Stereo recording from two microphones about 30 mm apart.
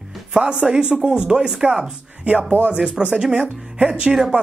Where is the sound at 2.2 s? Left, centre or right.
Right.